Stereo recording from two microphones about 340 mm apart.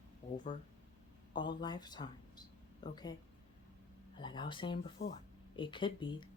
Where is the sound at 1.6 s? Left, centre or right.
Centre.